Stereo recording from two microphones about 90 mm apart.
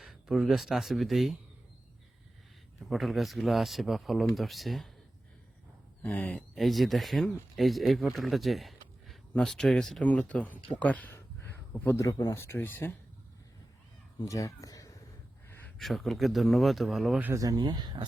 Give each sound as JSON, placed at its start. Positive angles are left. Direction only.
{"t": 0.0, "sound": "speech", "side_deg": -5}
{"t": 2.9, "sound": "speech", "side_deg": 0}
{"t": 6.0, "sound": "speech", "side_deg": 15}
{"t": 6.5, "sound": "speech", "side_deg": 0}
{"t": 11.9, "sound": "speech", "side_deg": 45}
{"t": 12.4, "sound": "speech", "side_deg": 25}
{"t": 14.2, "sound": "speech", "side_deg": 40}
{"t": 15.4, "sound": "a sound", "side_deg": 25}
{"t": 15.8, "sound": "speech", "side_deg": 0}
{"t": 17.3, "sound": "speech", "side_deg": -40}